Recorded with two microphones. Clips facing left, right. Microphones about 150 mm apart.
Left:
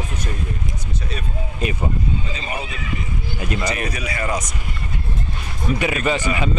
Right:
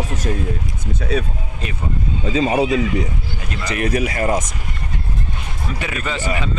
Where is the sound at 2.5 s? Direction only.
90° right.